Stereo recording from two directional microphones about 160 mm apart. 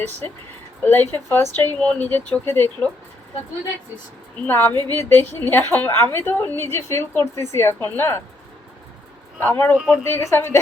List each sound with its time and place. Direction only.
0.8 s a woman's voice: 10° left (ahead or behind)
4.4 s a woman's voice: 15° left (ahead or behind)
9.4 s a woman's voice: 10° left (ahead or behind)
9.7 s speech: 5° right (ahead or behind)
10.0 s a woman's voice: 15° left (ahead or behind)